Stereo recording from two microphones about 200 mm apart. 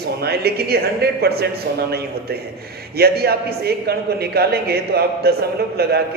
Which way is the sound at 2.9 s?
50° right (ahead or behind).